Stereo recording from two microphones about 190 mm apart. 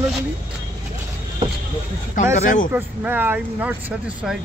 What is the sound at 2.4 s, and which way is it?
Speech, 45° left (ahead or behind).